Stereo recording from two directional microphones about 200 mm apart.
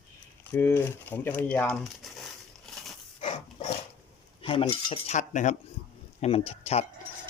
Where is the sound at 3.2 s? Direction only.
30° left (ahead or behind).